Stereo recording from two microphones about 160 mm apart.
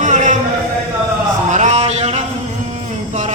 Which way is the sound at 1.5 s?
45° right (ahead or behind).